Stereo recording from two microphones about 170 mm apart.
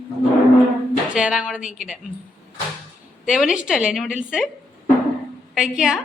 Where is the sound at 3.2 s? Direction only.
Centre (ahead or behind).